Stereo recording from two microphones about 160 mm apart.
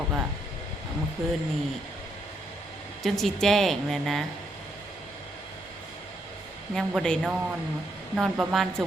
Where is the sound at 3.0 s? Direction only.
Centre (ahead or behind).